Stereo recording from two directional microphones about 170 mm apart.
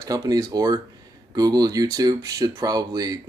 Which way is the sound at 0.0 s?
20° right (ahead or behind).